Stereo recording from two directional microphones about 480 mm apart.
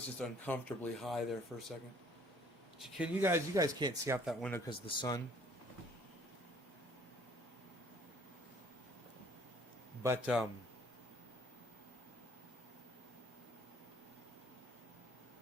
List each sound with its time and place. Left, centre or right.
0.2 s speech: centre
2.7 s speech: centre
10.0 s speech: centre